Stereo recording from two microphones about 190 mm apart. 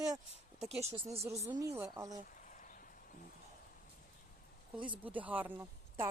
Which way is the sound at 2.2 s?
45° left (ahead or behind).